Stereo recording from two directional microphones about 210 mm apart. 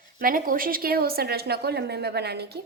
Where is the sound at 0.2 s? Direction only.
40° right (ahead or behind).